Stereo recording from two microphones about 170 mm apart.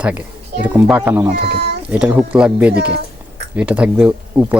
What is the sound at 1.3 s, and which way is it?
Speech, 70° right (ahead or behind).